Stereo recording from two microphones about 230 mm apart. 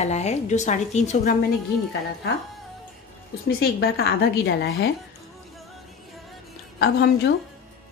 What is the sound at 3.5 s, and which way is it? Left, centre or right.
A woman's voice, left.